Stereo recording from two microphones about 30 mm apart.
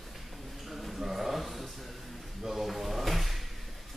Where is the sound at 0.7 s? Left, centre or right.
Centre.